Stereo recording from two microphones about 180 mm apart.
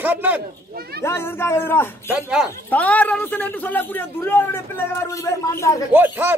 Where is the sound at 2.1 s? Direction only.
5° right (ahead or behind).